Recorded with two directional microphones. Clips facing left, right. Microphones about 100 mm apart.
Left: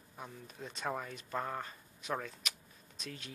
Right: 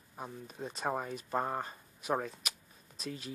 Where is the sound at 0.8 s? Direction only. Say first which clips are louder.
Right 4 dB; 25° right (ahead or behind).